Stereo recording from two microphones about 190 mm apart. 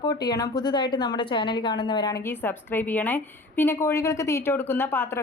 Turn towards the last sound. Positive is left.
turn(degrees=10)  # may be behind; listen again after turning